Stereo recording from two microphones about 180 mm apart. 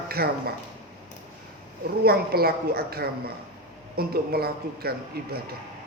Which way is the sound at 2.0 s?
60° right (ahead or behind).